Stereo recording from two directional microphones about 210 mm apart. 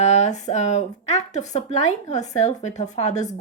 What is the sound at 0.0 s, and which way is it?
Speech, 30° left (ahead or behind).